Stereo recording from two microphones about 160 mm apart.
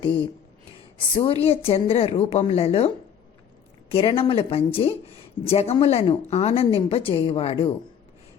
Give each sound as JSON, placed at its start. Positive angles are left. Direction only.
{"t": 0.9, "sound": "speech", "side_deg": 35}
{"t": 3.9, "sound": "speech", "side_deg": 35}